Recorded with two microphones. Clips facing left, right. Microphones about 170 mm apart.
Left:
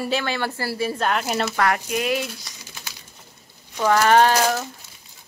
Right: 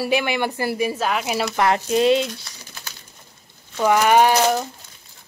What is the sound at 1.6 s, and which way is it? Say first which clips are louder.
Speech: right 7 dB; 25° right (ahead or behind).